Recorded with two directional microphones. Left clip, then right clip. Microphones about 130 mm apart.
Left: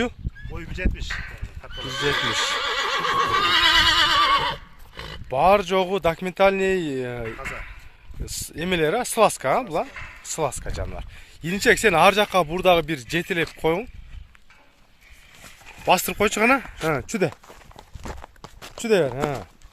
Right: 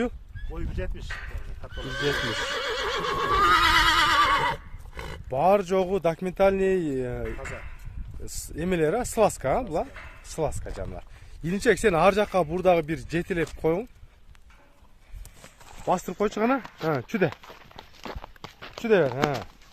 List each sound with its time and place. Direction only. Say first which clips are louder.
0.5 s speech: left 5 dB; 25° right (ahead or behind)
1.8 s speech: left 4 dB; 65° left (ahead or behind)
3.4 s neigh: left 1 dB; 80° right
3.9 s neigh: left 3 dB; 20° right (ahead or behind)
5.3 s speech: left 4 dB; centre (ahead or behind)
8.5 s speech: left 3 dB; centre (ahead or behind)
16.0 s speech: left 6 dB; 10° left (ahead or behind)
18.4 s a sound: right 1 dB; 10° left (ahead or behind)
18.9 s speech: left 1 dB; 15° left (ahead or behind)